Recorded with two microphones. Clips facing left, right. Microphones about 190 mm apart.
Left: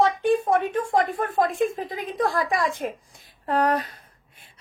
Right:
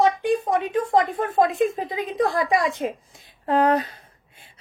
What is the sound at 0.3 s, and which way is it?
A woman's voice, 15° right (ahead or behind).